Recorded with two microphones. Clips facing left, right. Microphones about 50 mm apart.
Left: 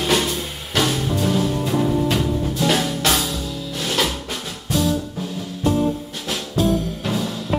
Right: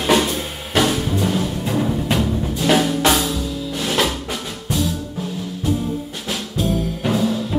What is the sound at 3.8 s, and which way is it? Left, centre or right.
Music, centre.